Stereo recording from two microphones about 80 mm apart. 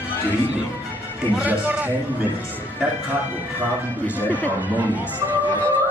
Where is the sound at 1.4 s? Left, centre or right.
Centre.